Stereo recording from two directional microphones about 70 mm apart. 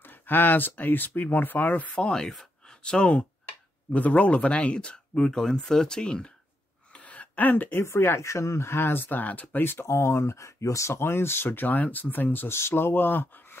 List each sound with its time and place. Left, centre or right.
0.0 s speech: left; by 6.3 s centre
6.9 s a sound: centre
7.8 s speech: left